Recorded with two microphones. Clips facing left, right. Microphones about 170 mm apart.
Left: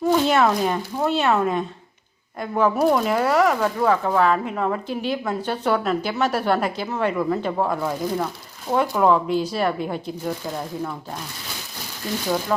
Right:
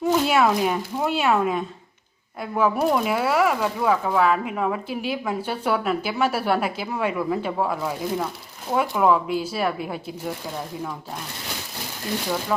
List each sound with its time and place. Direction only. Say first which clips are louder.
0.1 s speech: left 1 dB; 5° right (ahead or behind)
12.5 s speech: left 1 dB; centre (ahead or behind)